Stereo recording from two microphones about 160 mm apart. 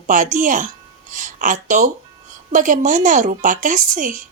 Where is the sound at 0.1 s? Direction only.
55° right (ahead or behind).